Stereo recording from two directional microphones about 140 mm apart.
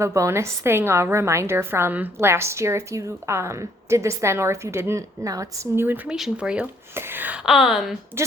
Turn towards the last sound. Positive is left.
turn(degrees=0)  # may be behind; listen again after turning